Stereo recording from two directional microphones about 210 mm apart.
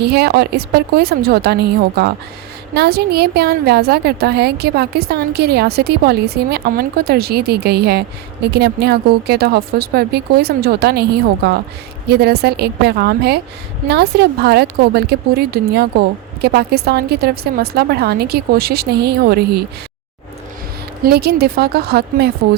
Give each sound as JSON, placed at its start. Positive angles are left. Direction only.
{"t": 0.0, "sound": "a woman's voice", "side_deg": -50}
{"t": 21.0, "sound": "a woman's voice", "side_deg": -50}